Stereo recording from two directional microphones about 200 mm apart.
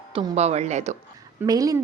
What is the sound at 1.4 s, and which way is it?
Speech, 15° right (ahead or behind).